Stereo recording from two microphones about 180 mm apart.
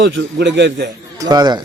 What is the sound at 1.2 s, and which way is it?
Speech, 20° right (ahead or behind).